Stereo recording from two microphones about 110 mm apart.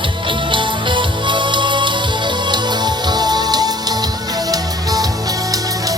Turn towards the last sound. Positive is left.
turn(degrees=-35)  # may be behind; listen again after turning